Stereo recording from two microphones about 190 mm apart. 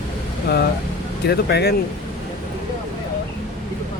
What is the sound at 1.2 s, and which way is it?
Speech, 60° left (ahead or behind).